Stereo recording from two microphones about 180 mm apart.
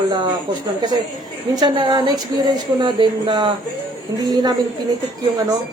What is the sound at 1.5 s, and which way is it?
A woman's voice, 25° right (ahead or behind).